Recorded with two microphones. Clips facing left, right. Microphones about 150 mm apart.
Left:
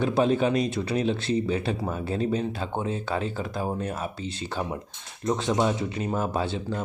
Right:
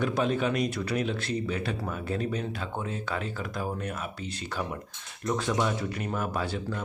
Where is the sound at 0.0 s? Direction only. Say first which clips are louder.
Left 4 dB; 30° left (ahead or behind).